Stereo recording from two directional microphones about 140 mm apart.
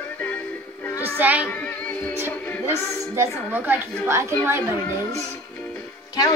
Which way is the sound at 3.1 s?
15° right (ahead or behind).